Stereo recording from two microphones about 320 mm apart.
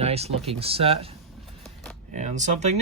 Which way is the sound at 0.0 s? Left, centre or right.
Centre.